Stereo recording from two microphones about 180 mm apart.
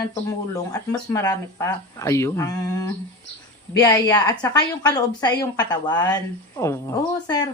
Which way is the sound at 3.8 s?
20° left (ahead or behind).